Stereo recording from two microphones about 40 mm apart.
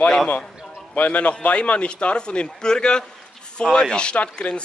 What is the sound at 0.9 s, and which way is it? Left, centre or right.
A man's voice, left.